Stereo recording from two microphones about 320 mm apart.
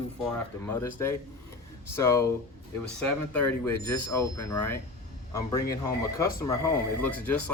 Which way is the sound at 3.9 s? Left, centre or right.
Centre.